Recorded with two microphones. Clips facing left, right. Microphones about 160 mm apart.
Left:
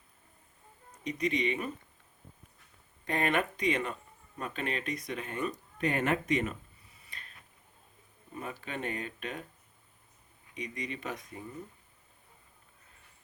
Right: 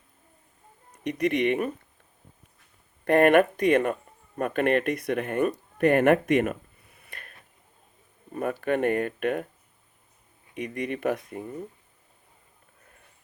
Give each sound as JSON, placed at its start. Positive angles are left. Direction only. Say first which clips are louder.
{"t": 1.0, "sound": "speech", "louder": "right 7 dB", "side_deg": -60}
{"t": 3.0, "sound": "speech", "louder": "right 12 dB", "side_deg": -60}
{"t": 10.5, "sound": "speech", "louder": "right 8 dB", "side_deg": -60}